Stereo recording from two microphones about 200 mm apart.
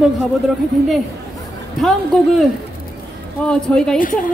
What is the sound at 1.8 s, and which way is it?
Speech, centre (ahead or behind).